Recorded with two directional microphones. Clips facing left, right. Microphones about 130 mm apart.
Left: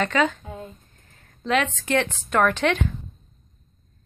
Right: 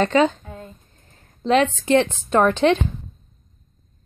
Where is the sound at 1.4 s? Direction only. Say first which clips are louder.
Right 5 dB; 30° right (ahead or behind).